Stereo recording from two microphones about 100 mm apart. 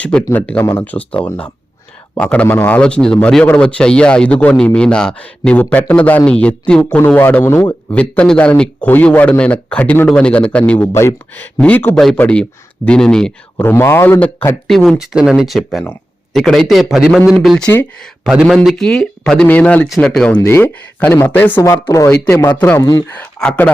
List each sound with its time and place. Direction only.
0.0 s a man's voice: 10° left (ahead or behind)
0.6 s speech: 35° left (ahead or behind)
0.9 s a man's voice: 15° left (ahead or behind)
7.2 s speech: 20° left (ahead or behind)
7.9 s a man's voice: 10° left (ahead or behind)
11.5 s a man's voice: 15° left (ahead or behind)
13.6 s speech: 20° left (ahead or behind)
14.7 s a man's voice: centre (ahead or behind)
20.4 s speech: 25° left (ahead or behind)
21.6 s speech: 35° left (ahead or behind)
22.1 s speech: 20° left (ahead or behind)
22.8 s speech: 45° left (ahead or behind)
23.0 s speech: 15° left (ahead or behind)